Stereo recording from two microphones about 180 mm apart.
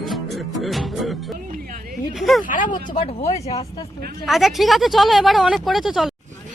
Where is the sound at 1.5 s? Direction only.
50° right (ahead or behind).